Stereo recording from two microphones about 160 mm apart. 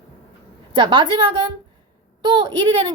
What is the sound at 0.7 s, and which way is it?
A woman's voice, 30° right (ahead or behind).